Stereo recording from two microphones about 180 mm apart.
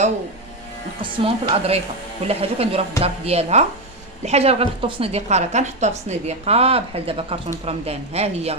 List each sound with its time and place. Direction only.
1.0 s a woman's voice: 30° right (ahead or behind)